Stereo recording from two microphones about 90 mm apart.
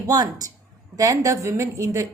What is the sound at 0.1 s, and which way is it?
Speech, 45° right (ahead or behind).